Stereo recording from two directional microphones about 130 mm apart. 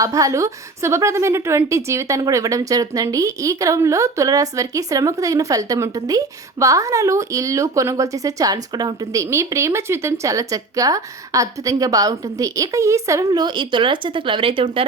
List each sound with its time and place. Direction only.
0.0 s a woman's voice: 25° right (ahead or behind); by 14.8 s 45° right (ahead or behind)